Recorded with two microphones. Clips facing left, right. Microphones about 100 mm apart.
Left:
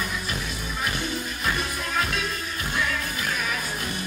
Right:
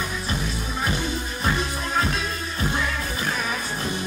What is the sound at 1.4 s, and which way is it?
Music, 30° right (ahead or behind).